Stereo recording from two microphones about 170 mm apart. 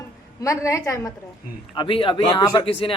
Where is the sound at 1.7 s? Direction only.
30° left (ahead or behind).